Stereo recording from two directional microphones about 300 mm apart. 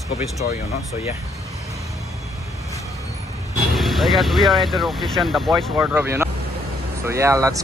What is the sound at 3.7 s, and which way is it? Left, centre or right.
Speech, centre.